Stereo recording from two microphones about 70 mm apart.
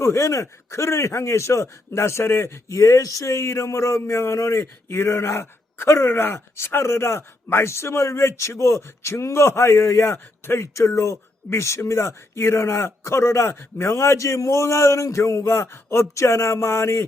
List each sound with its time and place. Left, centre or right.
0.0 s a man's voice: left